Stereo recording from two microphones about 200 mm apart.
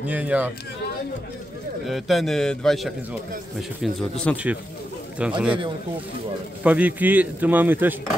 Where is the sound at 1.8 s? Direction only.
Centre (ahead or behind).